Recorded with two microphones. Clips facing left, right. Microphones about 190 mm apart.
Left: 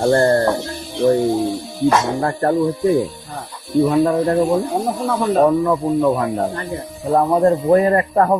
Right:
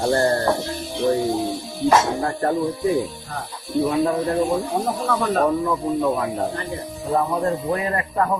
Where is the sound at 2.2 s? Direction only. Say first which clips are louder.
Left 4 dB; 55° left (ahead or behind).